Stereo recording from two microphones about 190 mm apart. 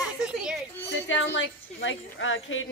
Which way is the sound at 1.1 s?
85° left.